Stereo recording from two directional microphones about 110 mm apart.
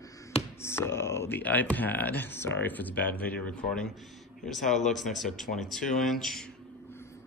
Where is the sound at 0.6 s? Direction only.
25° left (ahead or behind); by 6.5 s 5° left (ahead or behind).